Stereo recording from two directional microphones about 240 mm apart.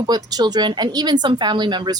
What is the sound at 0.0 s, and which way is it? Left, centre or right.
Speech, centre.